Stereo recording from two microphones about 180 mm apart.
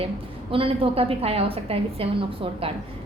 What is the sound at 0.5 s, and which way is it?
A woman's voice, 30° right (ahead or behind).